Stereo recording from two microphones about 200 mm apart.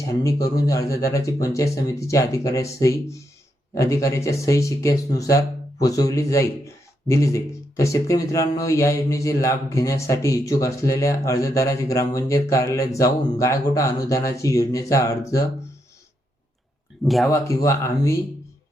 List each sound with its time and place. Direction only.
0.0 s speech: 15° left (ahead or behind)
17.0 s speech: centre (ahead or behind)
17.2 s speech: 15° left (ahead or behind)